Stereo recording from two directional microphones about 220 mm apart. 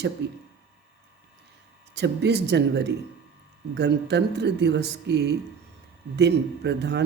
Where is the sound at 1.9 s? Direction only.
50° right (ahead or behind).